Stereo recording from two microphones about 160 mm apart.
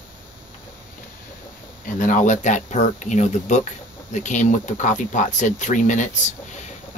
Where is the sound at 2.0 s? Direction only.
55° left (ahead or behind).